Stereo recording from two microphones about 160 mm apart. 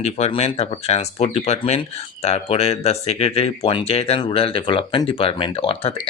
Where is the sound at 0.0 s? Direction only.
45° left (ahead or behind).